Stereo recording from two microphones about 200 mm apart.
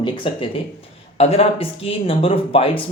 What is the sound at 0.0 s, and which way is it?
Speech, 25° left (ahead or behind).